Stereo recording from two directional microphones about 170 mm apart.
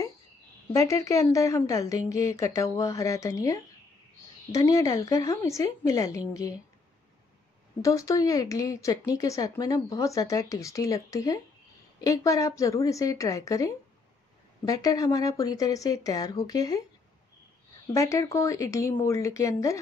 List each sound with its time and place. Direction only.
0.7 s speech: 20° left (ahead or behind)
7.8 s speech: 20° left (ahead or behind)
17.9 s speech: 15° left (ahead or behind)